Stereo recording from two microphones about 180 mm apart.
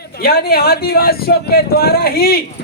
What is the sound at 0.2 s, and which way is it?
A man's voice, 55° left (ahead or behind).